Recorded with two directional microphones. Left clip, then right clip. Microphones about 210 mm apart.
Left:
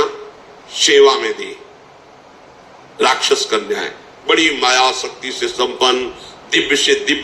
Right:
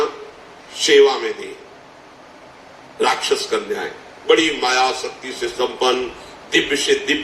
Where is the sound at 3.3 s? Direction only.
45° left (ahead or behind).